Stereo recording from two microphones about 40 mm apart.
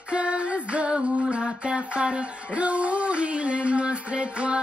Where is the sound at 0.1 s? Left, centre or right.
Right.